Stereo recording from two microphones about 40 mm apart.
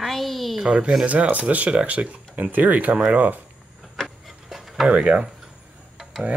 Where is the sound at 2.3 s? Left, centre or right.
Right.